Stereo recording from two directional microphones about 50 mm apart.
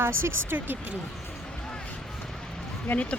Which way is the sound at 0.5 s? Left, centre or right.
Right.